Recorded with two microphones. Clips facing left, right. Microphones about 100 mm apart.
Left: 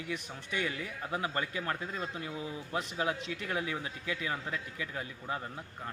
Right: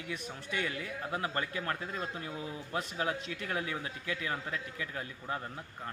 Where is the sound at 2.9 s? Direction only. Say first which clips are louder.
Left 2 dB; 20° left (ahead or behind).